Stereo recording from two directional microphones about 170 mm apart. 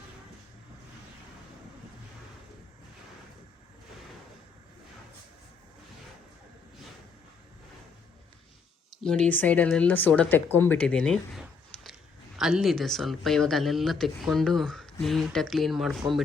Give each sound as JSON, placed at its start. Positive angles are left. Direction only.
{"t": 9.0, "sound": "speech", "side_deg": 5}